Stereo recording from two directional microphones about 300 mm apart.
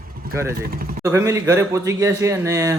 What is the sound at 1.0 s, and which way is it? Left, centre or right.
A man's voice, centre.